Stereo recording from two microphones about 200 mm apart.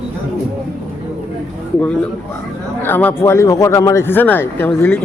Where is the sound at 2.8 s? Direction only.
10° left (ahead or behind).